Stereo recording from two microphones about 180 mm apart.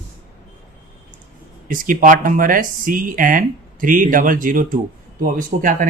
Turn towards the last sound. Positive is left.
turn(degrees=-45)  # may be behind; listen again after turning